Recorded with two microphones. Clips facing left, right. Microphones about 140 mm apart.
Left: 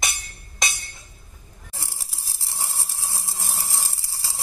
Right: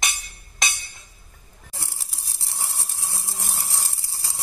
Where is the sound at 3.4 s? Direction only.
25° left (ahead or behind).